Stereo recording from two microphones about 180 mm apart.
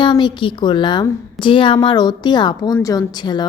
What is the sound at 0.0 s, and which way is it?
A woman's voice, 25° left (ahead or behind).